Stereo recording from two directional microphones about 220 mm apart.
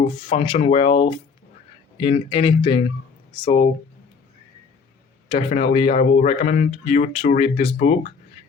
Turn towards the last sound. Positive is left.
turn(degrees=30)  # may be behind; listen again after turning